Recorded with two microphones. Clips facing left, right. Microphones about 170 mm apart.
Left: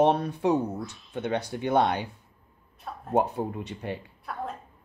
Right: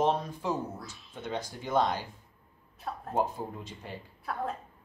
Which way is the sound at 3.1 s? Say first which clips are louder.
Left 6 dB; 70° left (ahead or behind).